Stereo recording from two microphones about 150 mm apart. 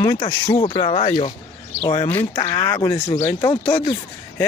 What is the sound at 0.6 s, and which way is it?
Speech, 35° left (ahead or behind).